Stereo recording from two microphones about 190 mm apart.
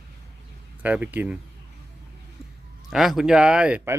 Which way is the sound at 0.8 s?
10° right (ahead or behind).